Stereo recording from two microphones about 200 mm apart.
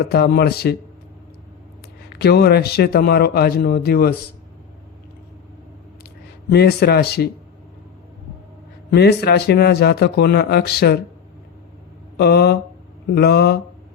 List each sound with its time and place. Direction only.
0.0 s a man's voice: 50° left (ahead or behind)
2.0 s a man's voice: 50° left (ahead or behind)
6.5 s a man's voice: 55° left (ahead or behind)
8.9 s a man's voice: 55° left (ahead or behind)
12.1 s a man's voice: 55° left (ahead or behind)